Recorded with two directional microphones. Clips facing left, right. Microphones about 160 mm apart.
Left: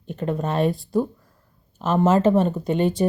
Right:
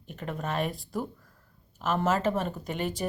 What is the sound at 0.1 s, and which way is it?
Speech, 30° left (ahead or behind).